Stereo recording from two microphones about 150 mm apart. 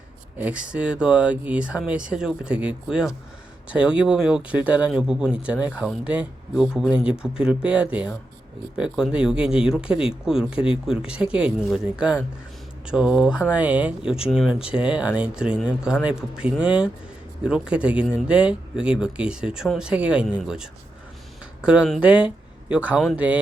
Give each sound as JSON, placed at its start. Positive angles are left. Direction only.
{"t": 0.3, "sound": "speech", "side_deg": -10}
{"t": 21.7, "sound": "speech", "side_deg": -5}